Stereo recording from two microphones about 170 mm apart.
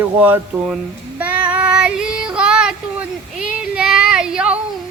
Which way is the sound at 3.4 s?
5° right (ahead or behind).